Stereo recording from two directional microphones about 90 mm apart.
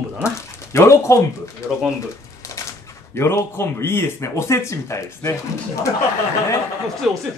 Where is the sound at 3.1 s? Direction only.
30° left (ahead or behind).